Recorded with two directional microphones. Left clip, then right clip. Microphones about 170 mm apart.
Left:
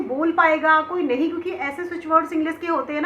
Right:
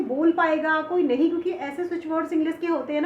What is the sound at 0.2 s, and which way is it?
A woman's voice, 40° right (ahead or behind).